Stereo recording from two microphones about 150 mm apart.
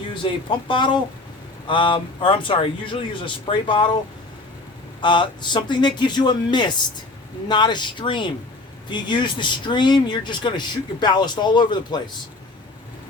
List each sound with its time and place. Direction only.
0.1 s speech: 35° left (ahead or behind)
4.9 s speech: 30° left (ahead or behind)